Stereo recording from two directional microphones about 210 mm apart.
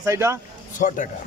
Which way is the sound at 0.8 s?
35° left (ahead or behind).